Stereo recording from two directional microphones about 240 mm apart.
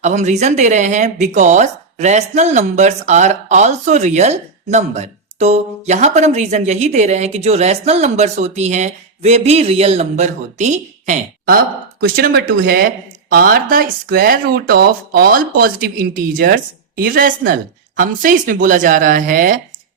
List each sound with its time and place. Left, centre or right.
0.0 s speech: right